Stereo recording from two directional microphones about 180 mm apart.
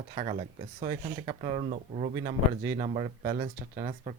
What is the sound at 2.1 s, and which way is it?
Speech, 25° right (ahead or behind).